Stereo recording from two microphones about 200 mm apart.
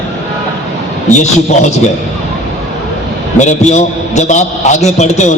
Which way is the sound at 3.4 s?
35° left (ahead or behind).